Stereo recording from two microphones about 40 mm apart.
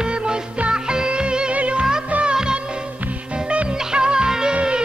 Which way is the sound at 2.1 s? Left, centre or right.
Right.